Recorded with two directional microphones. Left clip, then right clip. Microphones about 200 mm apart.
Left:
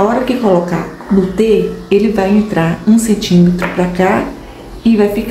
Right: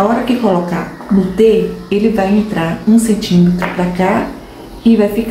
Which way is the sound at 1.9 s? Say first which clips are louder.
Left 3 dB; 30° left (ahead or behind).